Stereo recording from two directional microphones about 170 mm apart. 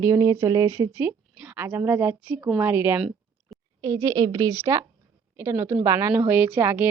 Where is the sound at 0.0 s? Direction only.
20° right (ahead or behind).